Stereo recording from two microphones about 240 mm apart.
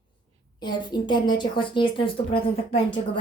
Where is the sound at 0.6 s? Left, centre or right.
Centre.